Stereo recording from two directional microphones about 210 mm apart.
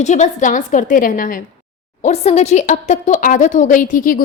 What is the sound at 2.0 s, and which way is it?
A woman's voice, 30° left (ahead or behind).